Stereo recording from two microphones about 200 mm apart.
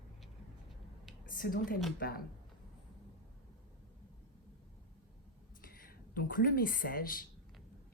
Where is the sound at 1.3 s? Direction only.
45° left (ahead or behind).